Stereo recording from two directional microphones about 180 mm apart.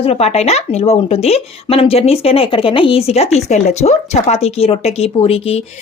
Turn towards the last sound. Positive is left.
turn(degrees=35)  # may be behind; listen again after turning